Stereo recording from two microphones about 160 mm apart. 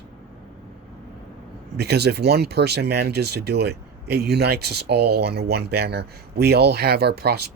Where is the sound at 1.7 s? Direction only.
90° right.